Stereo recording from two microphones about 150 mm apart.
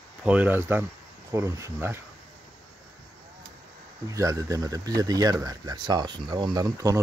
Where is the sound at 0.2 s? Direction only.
10° right (ahead or behind).